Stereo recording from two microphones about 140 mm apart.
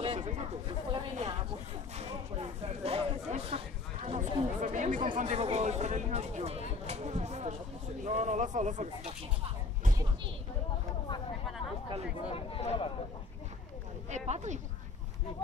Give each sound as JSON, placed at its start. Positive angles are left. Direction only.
{"t": 0.0, "sound": "speech", "side_deg": -45}
{"t": 3.3, "sound": "chatter", "side_deg": -45}
{"t": 5.1, "sound": "speech", "side_deg": -50}
{"t": 6.9, "sound": "a sound", "side_deg": -50}
{"t": 8.0, "sound": "speech", "side_deg": -60}
{"t": 12.3, "sound": "speech", "side_deg": 40}
{"t": 14.1, "sound": "speech", "side_deg": -55}